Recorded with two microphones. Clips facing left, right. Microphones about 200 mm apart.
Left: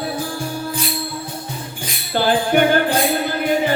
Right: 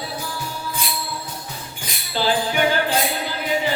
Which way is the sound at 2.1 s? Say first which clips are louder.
Left 5 dB; 55° left (ahead or behind).